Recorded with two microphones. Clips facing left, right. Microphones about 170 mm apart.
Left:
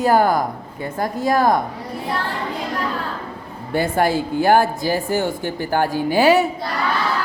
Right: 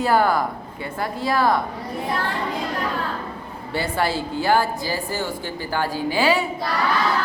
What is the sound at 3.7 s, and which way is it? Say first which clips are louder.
Speech: left 5 dB; 50° left (ahead or behind).